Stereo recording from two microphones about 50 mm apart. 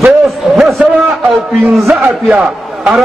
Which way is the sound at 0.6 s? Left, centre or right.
Centre.